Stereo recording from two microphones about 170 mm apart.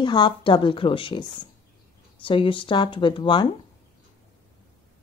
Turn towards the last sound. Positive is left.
turn(degrees=30)  # may be behind; listen again after turning